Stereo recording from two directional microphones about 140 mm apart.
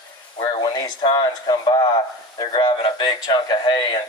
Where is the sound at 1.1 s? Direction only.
30° left (ahead or behind).